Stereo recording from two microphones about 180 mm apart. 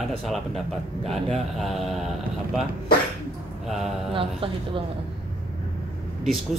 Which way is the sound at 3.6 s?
Centre (ahead or behind).